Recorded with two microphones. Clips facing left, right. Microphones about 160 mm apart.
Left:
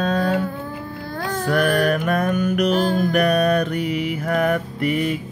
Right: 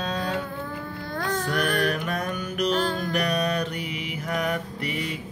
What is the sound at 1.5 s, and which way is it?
Music, 50° left (ahead or behind).